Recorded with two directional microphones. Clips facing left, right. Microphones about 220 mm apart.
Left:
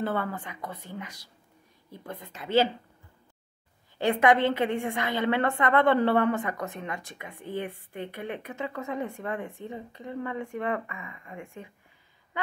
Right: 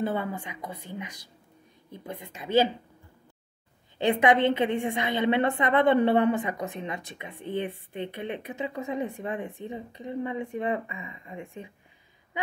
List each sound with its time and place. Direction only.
0.0 s a woman's voice: 15° right (ahead or behind)
4.0 s a woman's voice: 20° right (ahead or behind)